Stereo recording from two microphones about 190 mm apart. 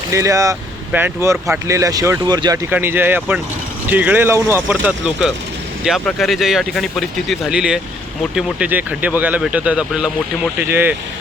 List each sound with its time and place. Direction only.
0.1 s speech: 15° right (ahead or behind)
2.6 s speech: 10° right (ahead or behind)